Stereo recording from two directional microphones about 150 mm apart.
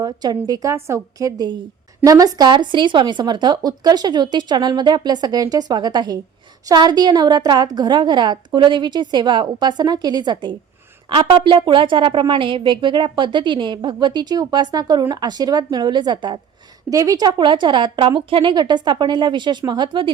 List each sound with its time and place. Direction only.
0.0 s a woman's voice: 25° right (ahead or behind)